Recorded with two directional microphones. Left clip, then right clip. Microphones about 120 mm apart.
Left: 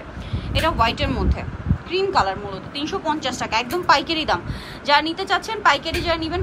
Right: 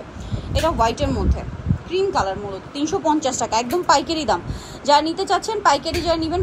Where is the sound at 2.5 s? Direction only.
45° right (ahead or behind).